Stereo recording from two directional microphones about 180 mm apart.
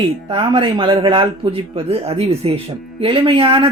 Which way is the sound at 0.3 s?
30° right (ahead or behind).